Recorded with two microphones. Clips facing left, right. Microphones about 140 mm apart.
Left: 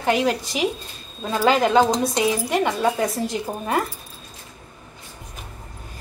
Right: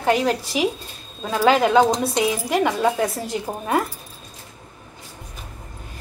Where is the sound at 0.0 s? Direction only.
Centre (ahead or behind).